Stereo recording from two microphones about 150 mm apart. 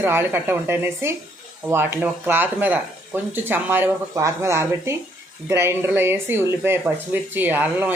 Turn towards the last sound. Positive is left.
turn(degrees=-10)  # may be behind; listen again after turning